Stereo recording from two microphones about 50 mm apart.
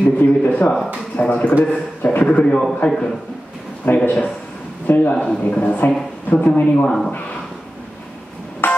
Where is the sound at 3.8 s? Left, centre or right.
Left.